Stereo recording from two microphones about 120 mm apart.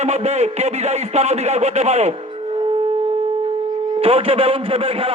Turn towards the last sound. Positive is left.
turn(degrees=-55)  # may be behind; listen again after turning